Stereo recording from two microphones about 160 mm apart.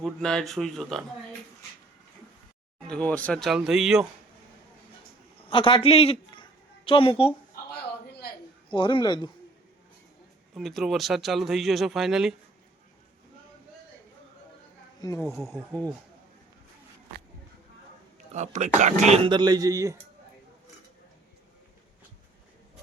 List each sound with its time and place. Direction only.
0.0 s a man's voice: 5° left (ahead or behind)
2.8 s a man's voice: 5° left (ahead or behind)
5.4 s music: 35° left (ahead or behind)
7.5 s a sound: 80° left
8.7 s a man's voice: 30° left (ahead or behind)
10.5 s a man's voice: centre (ahead or behind)
15.0 s a man's voice: 20° left (ahead or behind)
18.3 s speech: 50° right (ahead or behind); by 20.0 s 20° right (ahead or behind)